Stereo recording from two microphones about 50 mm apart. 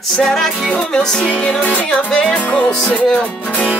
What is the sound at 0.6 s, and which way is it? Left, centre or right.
Music, centre.